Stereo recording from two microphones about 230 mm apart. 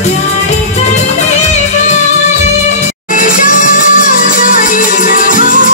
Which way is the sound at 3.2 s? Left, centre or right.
Left.